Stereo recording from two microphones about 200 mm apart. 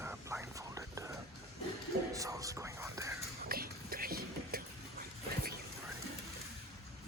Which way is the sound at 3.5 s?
45° right (ahead or behind).